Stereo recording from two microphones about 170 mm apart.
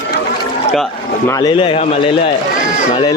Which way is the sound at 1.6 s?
30° left (ahead or behind).